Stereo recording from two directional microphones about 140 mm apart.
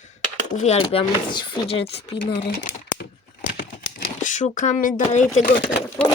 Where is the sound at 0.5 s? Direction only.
50° left (ahead or behind).